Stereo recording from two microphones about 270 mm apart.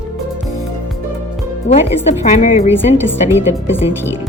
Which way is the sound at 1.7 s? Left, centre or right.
Left.